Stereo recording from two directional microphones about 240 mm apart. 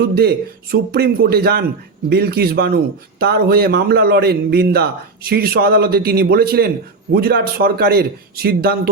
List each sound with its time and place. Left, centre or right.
0.1 s speech: right